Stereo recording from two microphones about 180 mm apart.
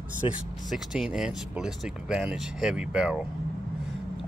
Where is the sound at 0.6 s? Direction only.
Centre (ahead or behind).